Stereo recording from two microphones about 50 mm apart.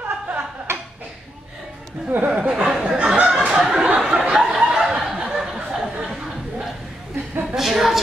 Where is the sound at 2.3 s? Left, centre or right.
Right.